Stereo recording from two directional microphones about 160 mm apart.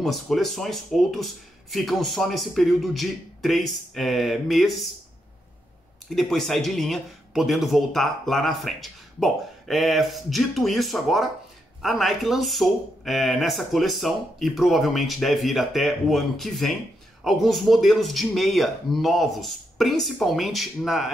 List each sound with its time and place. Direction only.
0.0 s a man's voice: centre (ahead or behind)
6.0 s a man's voice: centre (ahead or behind)